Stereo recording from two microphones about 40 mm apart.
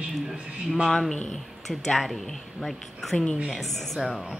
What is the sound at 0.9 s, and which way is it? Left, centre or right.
A woman's voice, centre.